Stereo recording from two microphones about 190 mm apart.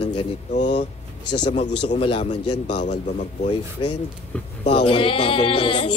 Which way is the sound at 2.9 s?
40° left (ahead or behind).